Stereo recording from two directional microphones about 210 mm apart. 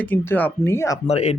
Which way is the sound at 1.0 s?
30° left (ahead or behind).